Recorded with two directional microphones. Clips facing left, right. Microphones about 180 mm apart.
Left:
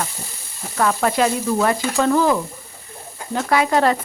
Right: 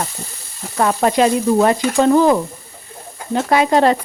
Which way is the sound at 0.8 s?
25° right (ahead or behind).